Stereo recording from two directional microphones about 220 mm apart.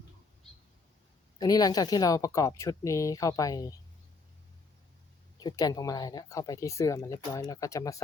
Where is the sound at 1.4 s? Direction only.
15° left (ahead or behind).